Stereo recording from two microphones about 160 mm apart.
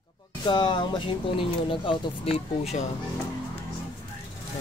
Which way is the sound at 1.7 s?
30° left (ahead or behind).